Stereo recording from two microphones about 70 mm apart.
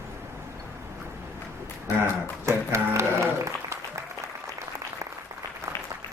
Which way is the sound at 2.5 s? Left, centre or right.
Right.